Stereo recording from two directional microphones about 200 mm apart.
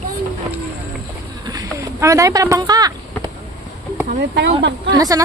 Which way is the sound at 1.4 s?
20° right (ahead or behind).